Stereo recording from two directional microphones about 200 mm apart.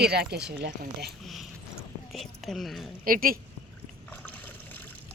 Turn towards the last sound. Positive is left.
turn(degrees=10)  # may be behind; listen again after turning